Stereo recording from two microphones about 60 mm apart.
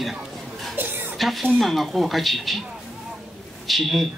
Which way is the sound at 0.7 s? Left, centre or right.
Right.